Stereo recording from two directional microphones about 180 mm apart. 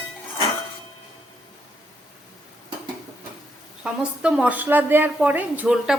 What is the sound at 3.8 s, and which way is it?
A woman's voice, 5° right (ahead or behind).